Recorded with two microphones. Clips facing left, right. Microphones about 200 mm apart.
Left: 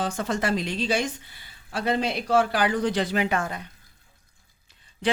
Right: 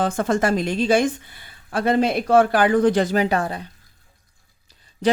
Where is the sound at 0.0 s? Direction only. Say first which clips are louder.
Right 6 dB; 50° right (ahead or behind); by 3.7 s 35° right (ahead or behind).